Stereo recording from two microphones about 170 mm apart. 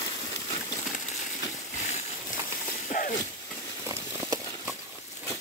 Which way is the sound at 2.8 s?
50° left (ahead or behind).